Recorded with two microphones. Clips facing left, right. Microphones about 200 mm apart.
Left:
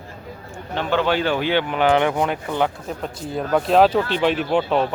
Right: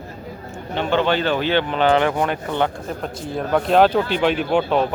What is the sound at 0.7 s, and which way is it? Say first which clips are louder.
Speech: right 1 dB; centre (ahead or behind).